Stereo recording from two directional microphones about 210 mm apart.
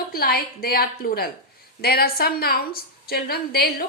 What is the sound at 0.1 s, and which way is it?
Speech, 45° left (ahead or behind).